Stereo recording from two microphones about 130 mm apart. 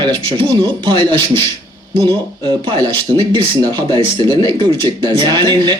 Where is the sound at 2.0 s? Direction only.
35° right (ahead or behind).